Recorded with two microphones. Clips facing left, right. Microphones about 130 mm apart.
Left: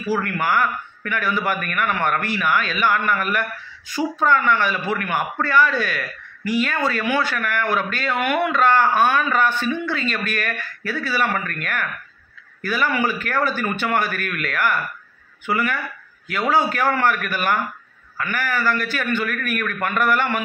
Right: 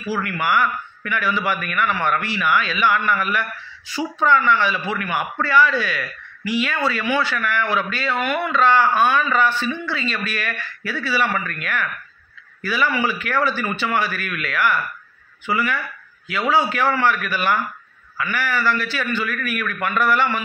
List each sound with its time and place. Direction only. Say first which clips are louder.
0.1 s speech: even; 45° left (ahead or behind)